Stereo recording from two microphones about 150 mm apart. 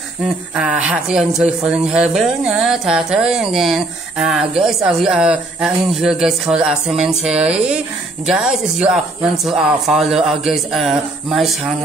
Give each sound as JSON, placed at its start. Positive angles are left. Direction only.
{"t": 0.6, "sound": "speech", "side_deg": -5}